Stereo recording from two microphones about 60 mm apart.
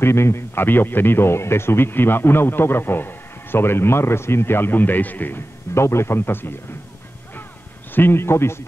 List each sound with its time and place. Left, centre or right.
0.0 s speech: left
5.8 s speech: left
7.9 s speech: left